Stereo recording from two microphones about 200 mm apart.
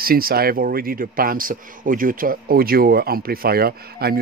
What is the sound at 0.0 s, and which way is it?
A man's voice, 50° right (ahead or behind).